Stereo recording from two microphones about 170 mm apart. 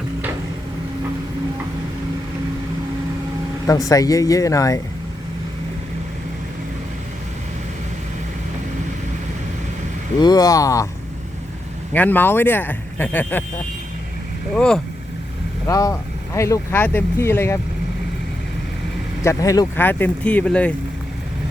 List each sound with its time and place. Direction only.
3.7 s speech: 20° left (ahead or behind)
10.2 s speech: 25° left (ahead or behind)
11.9 s speech: 10° left (ahead or behind)
14.5 s speech: 5° left (ahead or behind)
15.6 s speech: 20° left (ahead or behind)
19.2 s speech: 20° left (ahead or behind)